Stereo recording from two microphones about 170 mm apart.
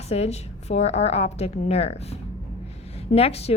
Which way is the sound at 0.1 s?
40° left (ahead or behind).